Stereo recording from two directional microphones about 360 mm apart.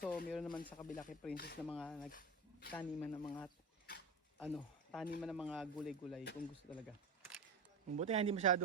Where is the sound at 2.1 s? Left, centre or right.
Left.